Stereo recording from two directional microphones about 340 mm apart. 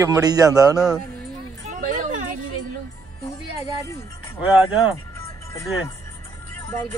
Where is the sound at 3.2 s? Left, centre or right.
Centre.